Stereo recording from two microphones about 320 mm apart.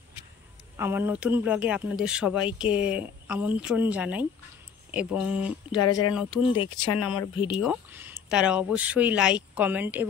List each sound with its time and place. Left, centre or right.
0.7 s speech: centre
5.8 s speech: left
7.3 s speech: centre
7.6 s speech: centre